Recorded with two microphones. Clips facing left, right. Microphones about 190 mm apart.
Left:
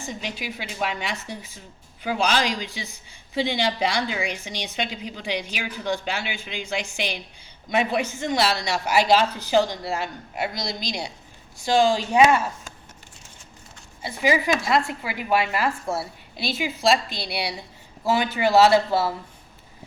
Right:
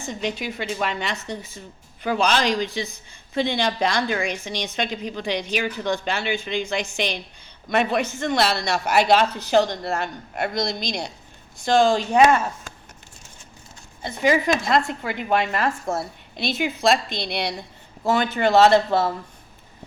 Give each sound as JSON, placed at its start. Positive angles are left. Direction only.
{"t": 0.1, "sound": "a woman's voice", "side_deg": 5}
{"t": 8.6, "sound": "speech", "side_deg": -65}
{"t": 9.3, "sound": "a woman's voice", "side_deg": 10}
{"t": 10.3, "sound": "a woman's voice", "side_deg": -50}
{"t": 11.6, "sound": "a woman's voice", "side_deg": 10}
{"t": 14.0, "sound": "a woman's voice", "side_deg": 5}